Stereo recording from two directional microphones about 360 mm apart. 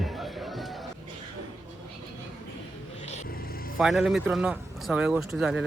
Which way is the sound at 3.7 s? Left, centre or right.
Centre.